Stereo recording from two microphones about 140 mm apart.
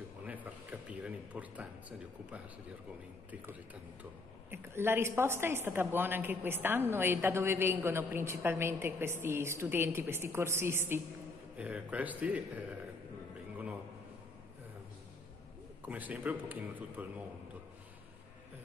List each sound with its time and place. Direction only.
0.2 s a sound: 10° right (ahead or behind)
3.3 s speech: 10° right (ahead or behind)
15.8 s speech: 10° right (ahead or behind)